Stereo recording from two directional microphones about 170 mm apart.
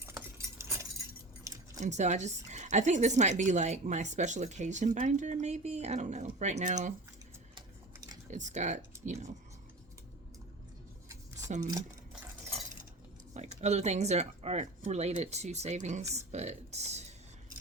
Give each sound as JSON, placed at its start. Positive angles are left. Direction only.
{"t": 0.0, "sound": "a sound", "side_deg": -15}
{"t": 1.5, "sound": "keys jangling", "side_deg": -20}
{"t": 1.8, "sound": "a woman's voice", "side_deg": -45}
{"t": 8.3, "sound": "a woman's voice", "side_deg": -45}
{"t": 11.4, "sound": "speech", "side_deg": -45}
{"t": 13.3, "sound": "speech", "side_deg": -40}